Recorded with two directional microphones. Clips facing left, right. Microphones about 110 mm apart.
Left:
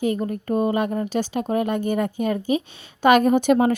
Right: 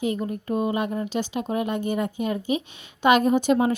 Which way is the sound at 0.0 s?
45° left (ahead or behind).